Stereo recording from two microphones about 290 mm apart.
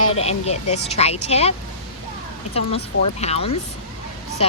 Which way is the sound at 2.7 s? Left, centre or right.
Left.